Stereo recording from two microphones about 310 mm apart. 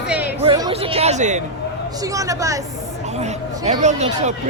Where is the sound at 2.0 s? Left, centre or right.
Centre.